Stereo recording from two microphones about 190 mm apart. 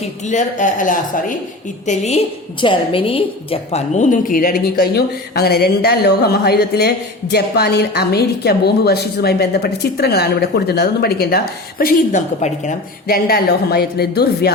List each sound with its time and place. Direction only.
0.3 s a woman's voice: 40° left (ahead or behind)